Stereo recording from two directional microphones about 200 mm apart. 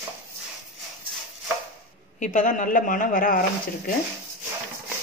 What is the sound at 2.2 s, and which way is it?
A woman's voice, 40° left (ahead or behind).